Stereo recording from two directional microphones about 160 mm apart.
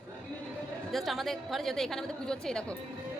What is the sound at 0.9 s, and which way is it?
A woman's voice, centre (ahead or behind).